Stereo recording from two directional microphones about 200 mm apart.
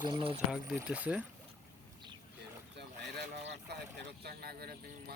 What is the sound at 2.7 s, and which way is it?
Boat, 55° right (ahead or behind).